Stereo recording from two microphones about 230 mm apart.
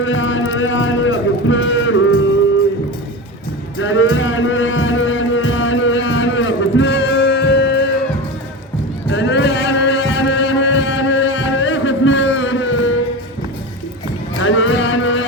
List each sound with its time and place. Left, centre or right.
0.0 s speech: left
3.8 s music: left
9.1 s a sound: left
14.4 s music: left